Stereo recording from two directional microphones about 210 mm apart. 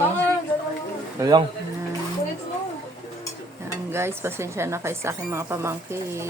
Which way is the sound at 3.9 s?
10° right (ahead or behind).